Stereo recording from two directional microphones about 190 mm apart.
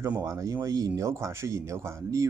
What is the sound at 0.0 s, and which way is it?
Speech, 15° right (ahead or behind).